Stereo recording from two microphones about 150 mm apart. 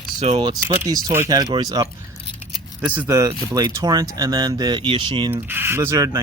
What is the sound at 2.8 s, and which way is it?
Speech, 10° right (ahead or behind).